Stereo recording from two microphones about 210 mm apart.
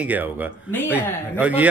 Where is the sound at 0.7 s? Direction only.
10° left (ahead or behind).